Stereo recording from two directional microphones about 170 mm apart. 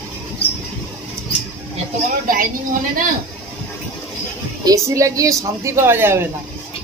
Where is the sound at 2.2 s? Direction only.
55° right (ahead or behind).